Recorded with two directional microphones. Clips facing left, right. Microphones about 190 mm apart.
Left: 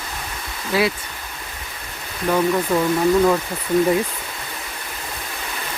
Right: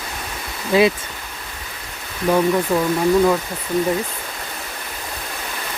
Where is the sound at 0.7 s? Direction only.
20° right (ahead or behind).